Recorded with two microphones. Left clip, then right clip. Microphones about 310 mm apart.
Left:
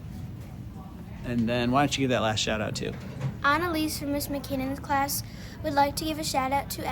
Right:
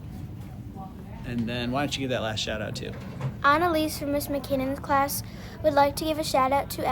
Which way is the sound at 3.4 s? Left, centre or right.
Centre.